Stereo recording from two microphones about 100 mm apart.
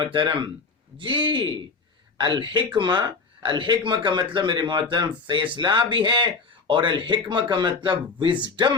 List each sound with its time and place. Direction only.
0.0 s speech: 50° right (ahead or behind)